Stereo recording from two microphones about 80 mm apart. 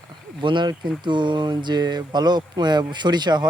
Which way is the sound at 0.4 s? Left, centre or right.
Right.